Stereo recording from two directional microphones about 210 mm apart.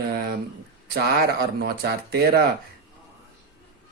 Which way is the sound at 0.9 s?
50° right (ahead or behind).